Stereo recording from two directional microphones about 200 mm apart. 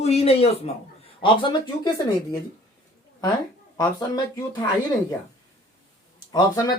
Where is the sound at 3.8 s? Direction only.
20° left (ahead or behind).